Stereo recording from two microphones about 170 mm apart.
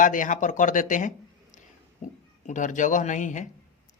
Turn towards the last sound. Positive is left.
turn(degrees=45)  # may be behind; listen again after turning